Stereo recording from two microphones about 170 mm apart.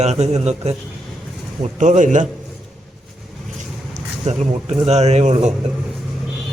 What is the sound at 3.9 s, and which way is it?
Speech, 45° right (ahead or behind).